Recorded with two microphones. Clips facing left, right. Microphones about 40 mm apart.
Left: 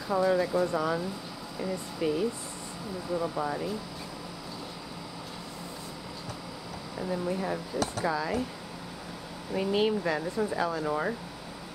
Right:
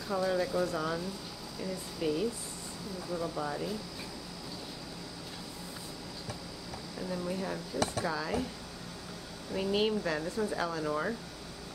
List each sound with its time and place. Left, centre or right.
0.1 s speech: centre
7.0 s speech: centre
9.5 s speech: centre